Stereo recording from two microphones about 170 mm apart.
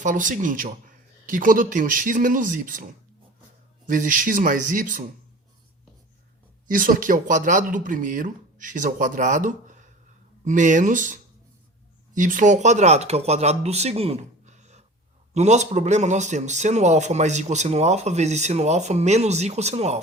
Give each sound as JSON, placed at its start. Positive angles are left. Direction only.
{"t": 0.0, "sound": "speech", "side_deg": -50}
{"t": 6.7, "sound": "a man's voice", "side_deg": -55}